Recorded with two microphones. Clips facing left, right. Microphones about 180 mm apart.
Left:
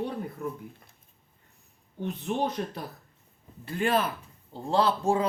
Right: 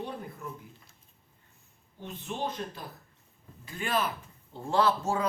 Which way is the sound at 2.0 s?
50° left (ahead or behind).